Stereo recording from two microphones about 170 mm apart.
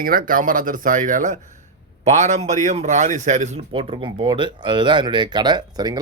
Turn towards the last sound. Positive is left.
turn(degrees=-25)  # may be behind; listen again after turning